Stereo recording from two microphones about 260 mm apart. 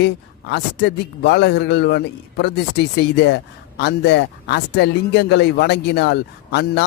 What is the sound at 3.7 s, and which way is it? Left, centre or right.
Speech, left.